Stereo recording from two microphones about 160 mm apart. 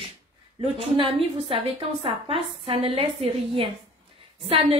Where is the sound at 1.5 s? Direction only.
40° right (ahead or behind).